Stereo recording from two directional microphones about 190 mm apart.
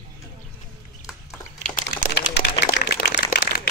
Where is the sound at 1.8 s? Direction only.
60° left (ahead or behind).